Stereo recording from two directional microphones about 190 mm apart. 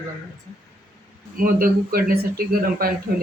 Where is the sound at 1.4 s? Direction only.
50° right (ahead or behind).